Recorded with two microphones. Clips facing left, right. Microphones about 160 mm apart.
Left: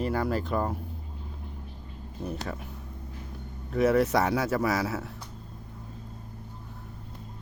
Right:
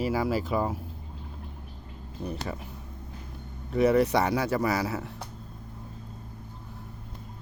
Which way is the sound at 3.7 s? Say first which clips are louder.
Right 1 dB; centre (ahead or behind).